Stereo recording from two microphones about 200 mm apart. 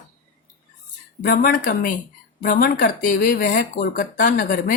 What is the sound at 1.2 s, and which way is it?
Speech, 45° left (ahead or behind).